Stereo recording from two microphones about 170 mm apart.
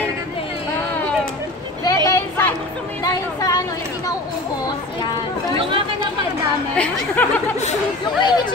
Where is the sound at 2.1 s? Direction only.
15° left (ahead or behind).